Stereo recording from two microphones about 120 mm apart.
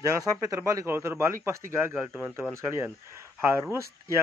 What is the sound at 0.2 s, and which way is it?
Speech, 30° right (ahead or behind).